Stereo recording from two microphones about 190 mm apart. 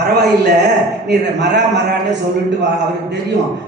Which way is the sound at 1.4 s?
65° right (ahead or behind).